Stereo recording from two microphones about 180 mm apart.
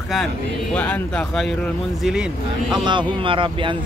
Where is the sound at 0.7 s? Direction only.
5° left (ahead or behind).